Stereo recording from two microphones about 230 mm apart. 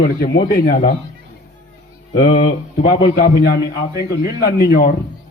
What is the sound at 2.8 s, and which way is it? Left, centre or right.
A man's voice, left.